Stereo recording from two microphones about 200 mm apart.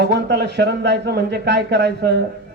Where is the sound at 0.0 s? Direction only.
60° right (ahead or behind).